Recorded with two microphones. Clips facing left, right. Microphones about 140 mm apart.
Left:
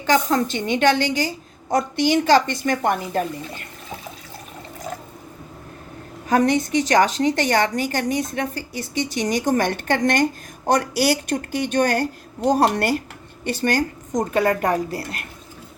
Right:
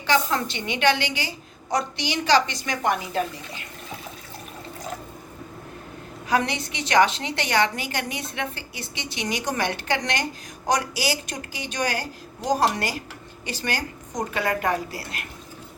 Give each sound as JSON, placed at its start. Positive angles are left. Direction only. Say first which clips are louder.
{"t": 0.0, "sound": "a woman's voice", "louder": "left 4 dB", "side_deg": 40}
{"t": 6.2, "sound": "a woman's voice", "louder": "left 6 dB", "side_deg": 45}